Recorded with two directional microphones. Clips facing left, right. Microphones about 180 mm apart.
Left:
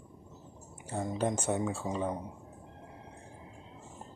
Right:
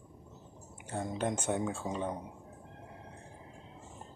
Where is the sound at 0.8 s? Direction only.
5° left (ahead or behind).